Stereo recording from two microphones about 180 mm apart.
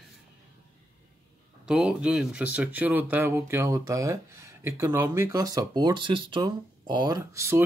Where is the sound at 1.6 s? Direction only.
5° right (ahead or behind).